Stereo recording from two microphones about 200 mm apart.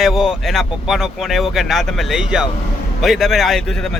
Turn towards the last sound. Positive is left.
turn(degrees=0)  # may be behind; listen again after turning